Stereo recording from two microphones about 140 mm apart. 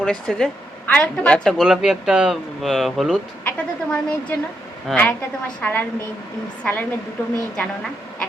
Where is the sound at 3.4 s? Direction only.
15° left (ahead or behind).